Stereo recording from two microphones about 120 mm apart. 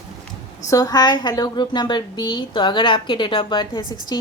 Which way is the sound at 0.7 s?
30° left (ahead or behind).